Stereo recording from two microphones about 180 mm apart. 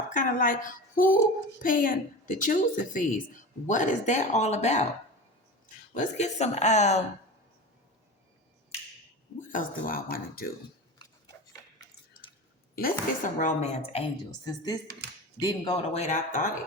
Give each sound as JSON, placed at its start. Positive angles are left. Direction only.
{"t": 0.1, "sound": "a woman's voice", "side_deg": 50}
{"t": 5.9, "sound": "a woman's voice", "side_deg": 40}
{"t": 9.5, "sound": "a woman's voice", "side_deg": 50}
{"t": 12.7, "sound": "a woman's voice", "side_deg": 50}
{"t": 14.4, "sound": "a woman's voice", "side_deg": 20}